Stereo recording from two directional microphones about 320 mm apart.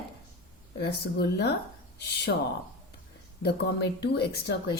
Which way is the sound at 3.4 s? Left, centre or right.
Left.